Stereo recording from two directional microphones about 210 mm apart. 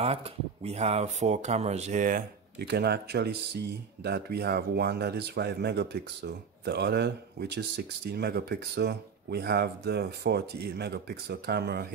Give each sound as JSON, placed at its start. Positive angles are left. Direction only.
{"t": 0.0, "sound": "speech", "side_deg": -30}